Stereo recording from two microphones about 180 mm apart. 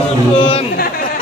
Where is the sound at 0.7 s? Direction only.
55° left (ahead or behind).